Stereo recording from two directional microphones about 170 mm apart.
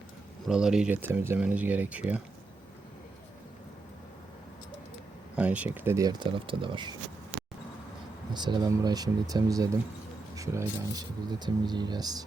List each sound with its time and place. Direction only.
0.4 s speech: 5° right (ahead or behind)
5.4 s speech: 10° right (ahead or behind); by 6.9 s 30° right (ahead or behind)
8.3 s speech: 25° right (ahead or behind)